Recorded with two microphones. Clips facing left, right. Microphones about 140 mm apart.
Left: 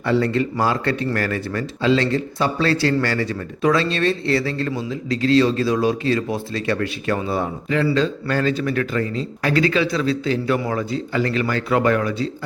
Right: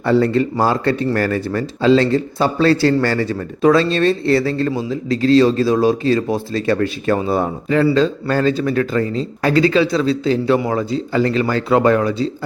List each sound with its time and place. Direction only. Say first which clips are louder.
0.0 s speech: right 4 dB; 35° right (ahead or behind)
7.3 s speech: right 5 dB; 45° right (ahead or behind)